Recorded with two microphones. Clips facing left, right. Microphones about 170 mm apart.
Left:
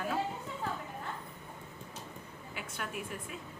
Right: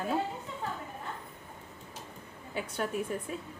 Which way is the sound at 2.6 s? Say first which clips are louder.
Right 8 dB; 35° right (ahead or behind).